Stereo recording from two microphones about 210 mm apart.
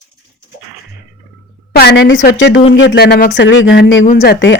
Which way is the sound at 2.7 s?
55° left (ahead or behind).